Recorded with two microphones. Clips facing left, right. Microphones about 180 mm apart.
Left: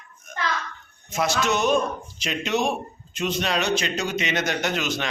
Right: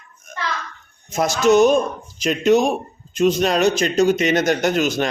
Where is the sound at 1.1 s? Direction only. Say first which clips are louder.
Right 8 dB; 45° right (ahead or behind).